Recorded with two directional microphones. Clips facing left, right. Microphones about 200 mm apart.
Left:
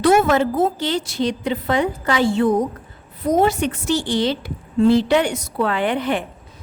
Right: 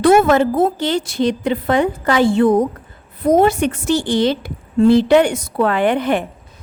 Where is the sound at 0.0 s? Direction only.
50° right (ahead or behind).